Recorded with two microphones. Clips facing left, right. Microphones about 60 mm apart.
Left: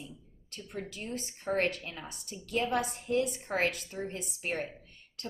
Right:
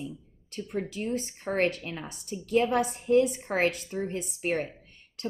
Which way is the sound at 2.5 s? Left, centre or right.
Right.